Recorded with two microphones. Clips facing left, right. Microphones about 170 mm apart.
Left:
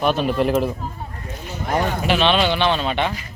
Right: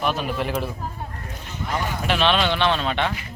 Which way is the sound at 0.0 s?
30° left (ahead or behind).